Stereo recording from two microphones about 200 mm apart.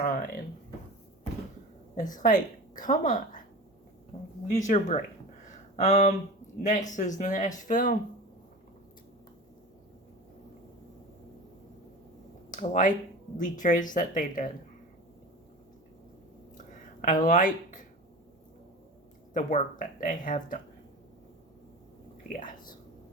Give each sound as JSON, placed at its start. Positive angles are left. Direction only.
{"t": 0.0, "sound": "a sound", "side_deg": 45}
{"t": 2.0, "sound": "a woman's voice", "side_deg": 40}
{"t": 4.5, "sound": "a woman's voice", "side_deg": 40}
{"t": 5.5, "sound": "a sound", "side_deg": 35}
{"t": 6.6, "sound": "a woman's voice", "side_deg": 35}
{"t": 12.5, "sound": "a woman's voice", "side_deg": 40}
{"t": 16.6, "sound": "a sound", "side_deg": 40}
{"t": 19.3, "sound": "a woman's voice", "side_deg": 40}
{"t": 22.3, "sound": "speech", "side_deg": 45}